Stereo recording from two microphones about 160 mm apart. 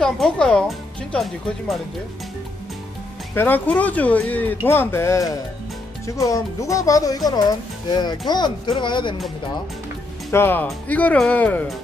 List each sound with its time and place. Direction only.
0.0 s speech: 5° left (ahead or behind)
3.3 s speech: 10° left (ahead or behind); by 9.1 s 30° left (ahead or behind)
10.3 s speech: 15° left (ahead or behind)